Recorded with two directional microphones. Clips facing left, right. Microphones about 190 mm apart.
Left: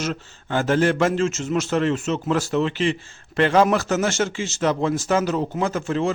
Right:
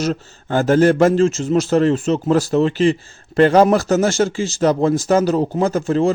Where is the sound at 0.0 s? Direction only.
40° right (ahead or behind).